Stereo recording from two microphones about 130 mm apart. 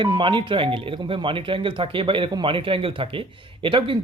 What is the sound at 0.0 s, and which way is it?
Speech, 40° right (ahead or behind).